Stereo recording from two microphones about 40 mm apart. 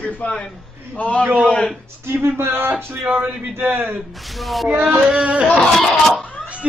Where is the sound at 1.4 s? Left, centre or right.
Left.